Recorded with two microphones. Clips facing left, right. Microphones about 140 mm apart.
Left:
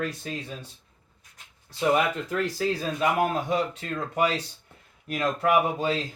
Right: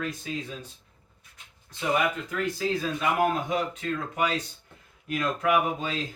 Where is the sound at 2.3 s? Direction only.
35° left (ahead or behind).